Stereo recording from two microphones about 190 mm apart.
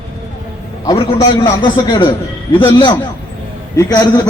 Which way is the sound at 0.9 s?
20° left (ahead or behind).